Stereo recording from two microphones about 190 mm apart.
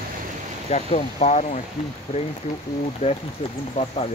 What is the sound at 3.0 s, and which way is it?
Speech, 30° left (ahead or behind).